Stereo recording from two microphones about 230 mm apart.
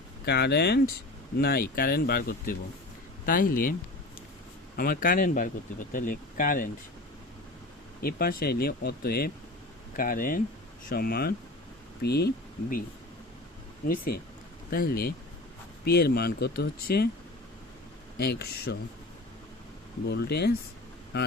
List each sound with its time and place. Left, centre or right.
0.3 s speech: left
4.8 s speech: left
8.0 s speech: left
13.8 s speech: left
18.2 s speech: left
20.1 s speech: left